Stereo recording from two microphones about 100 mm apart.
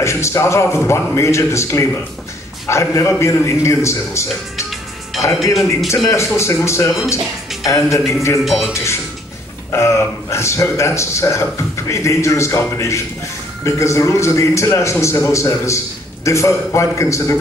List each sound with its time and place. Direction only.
0.0 s a man's voice: 30° left (ahead or behind)
5.4 s speech: centre (ahead or behind)
6.0 s a man's voice: 30° left (ahead or behind)
8.5 s speech: centre (ahead or behind)
9.7 s a man's voice: 30° left (ahead or behind)